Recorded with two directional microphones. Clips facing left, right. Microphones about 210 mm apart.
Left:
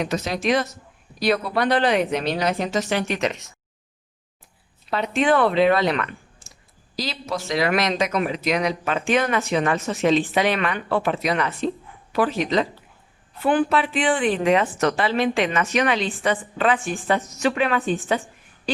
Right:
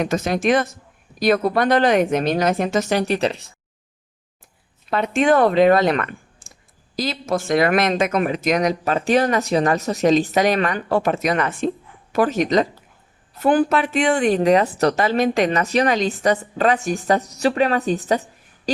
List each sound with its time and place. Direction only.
0.0 s speech: 50° right (ahead or behind); by 3.5 s 35° right (ahead or behind)
4.9 s a woman's voice: 50° right (ahead or behind)